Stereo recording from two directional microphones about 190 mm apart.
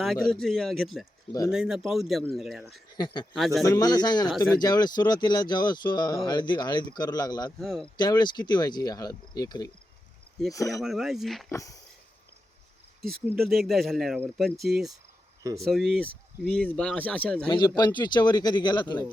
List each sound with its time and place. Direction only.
0.0 s speech: centre (ahead or behind)
2.9 s speech: 25° left (ahead or behind)
3.3 s speech: centre (ahead or behind)
3.6 s speech: 20° left (ahead or behind)
7.6 s speech: centre (ahead or behind)
7.9 s speech: 20° left (ahead or behind)
10.8 s speech: centre (ahead or behind)
11.4 s speech: 15° left (ahead or behind)
13.0 s speech: centre (ahead or behind)
17.5 s speech: 25° left (ahead or behind)